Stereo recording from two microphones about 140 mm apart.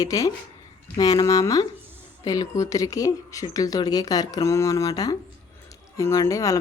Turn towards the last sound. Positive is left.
turn(degrees=25)  # may be behind; listen again after turning